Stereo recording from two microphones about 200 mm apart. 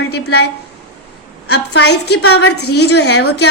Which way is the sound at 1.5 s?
55° left (ahead or behind).